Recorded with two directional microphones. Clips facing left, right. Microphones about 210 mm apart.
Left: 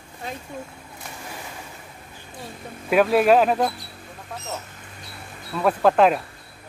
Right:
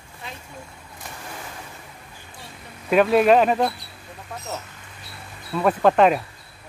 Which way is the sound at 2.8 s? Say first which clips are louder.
Right 1 dB; 5° left (ahead or behind).